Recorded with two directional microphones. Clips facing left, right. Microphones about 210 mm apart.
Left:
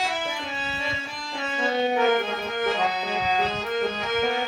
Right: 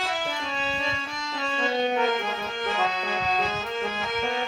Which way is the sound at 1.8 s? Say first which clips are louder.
Left 2 dB; 5° left (ahead or behind).